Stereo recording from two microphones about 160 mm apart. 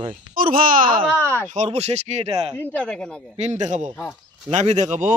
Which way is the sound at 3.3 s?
45° right (ahead or behind).